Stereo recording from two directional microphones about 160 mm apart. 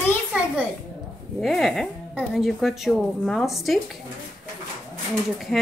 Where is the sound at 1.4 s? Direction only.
Centre (ahead or behind).